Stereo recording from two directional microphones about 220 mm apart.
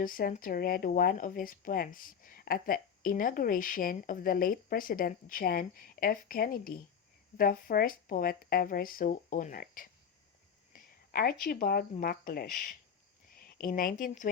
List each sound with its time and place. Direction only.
0.0 s speech: 40° left (ahead or behind)